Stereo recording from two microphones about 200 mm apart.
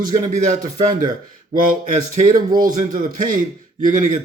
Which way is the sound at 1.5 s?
45° right (ahead or behind).